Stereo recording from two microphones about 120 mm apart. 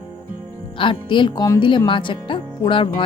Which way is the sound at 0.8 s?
45° left (ahead or behind).